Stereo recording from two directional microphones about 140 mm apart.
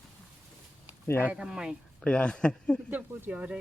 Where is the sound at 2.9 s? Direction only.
10° right (ahead or behind).